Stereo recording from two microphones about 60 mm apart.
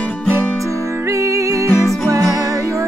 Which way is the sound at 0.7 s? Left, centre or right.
Right.